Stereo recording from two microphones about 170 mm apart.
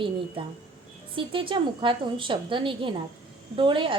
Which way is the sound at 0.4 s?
30° right (ahead or behind).